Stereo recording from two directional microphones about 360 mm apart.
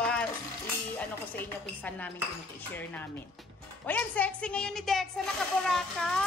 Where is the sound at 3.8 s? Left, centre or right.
Centre.